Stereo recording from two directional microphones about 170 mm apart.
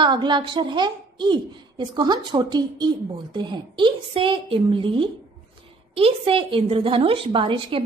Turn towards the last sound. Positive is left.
turn(degrees=-30)  # may be behind; listen again after turning